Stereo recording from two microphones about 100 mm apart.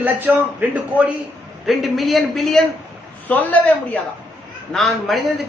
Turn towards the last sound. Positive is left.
turn(degrees=0)  # may be behind; listen again after turning